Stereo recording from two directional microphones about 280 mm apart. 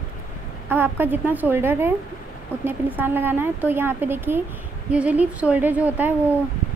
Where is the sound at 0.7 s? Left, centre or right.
Centre.